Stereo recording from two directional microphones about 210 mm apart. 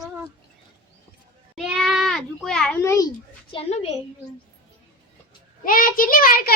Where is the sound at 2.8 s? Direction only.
15° left (ahead or behind).